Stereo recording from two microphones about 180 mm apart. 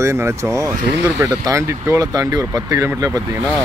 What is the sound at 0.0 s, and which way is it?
Speech, 15° right (ahead or behind).